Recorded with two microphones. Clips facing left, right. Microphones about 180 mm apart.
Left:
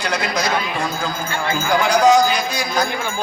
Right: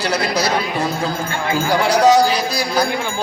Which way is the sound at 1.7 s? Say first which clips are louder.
Right 1 dB; 35° right (ahead or behind).